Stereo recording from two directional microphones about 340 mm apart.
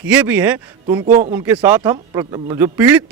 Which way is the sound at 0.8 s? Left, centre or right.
Centre.